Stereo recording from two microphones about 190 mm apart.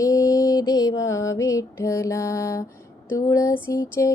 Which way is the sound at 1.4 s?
15° left (ahead or behind).